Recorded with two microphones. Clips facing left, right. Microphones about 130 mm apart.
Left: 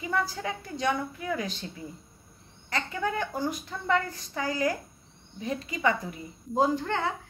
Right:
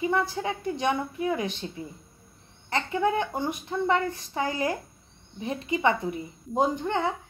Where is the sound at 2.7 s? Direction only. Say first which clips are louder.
Right 5 dB; 25° right (ahead or behind).